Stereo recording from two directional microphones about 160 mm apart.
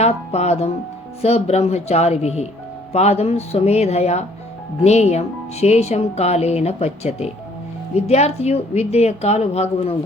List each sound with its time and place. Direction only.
0.0 s speech: 40° left (ahead or behind)